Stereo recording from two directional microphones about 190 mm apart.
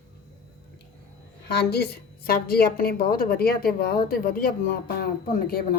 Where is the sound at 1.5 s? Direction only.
60° left (ahead or behind).